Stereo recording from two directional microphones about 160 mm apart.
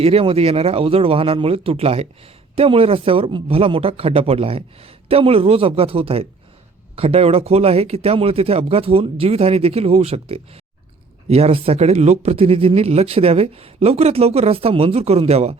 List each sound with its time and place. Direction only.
0.0 s speech: 35° right (ahead or behind)